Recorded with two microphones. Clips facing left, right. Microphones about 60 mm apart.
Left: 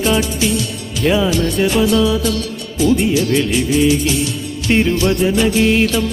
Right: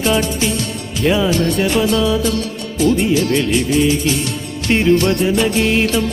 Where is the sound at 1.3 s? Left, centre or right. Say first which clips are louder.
Right 1 dB; right.